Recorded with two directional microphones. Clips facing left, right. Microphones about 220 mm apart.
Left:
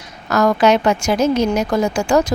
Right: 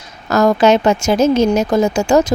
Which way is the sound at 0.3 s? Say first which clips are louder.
Right 3 dB; 25° right (ahead or behind).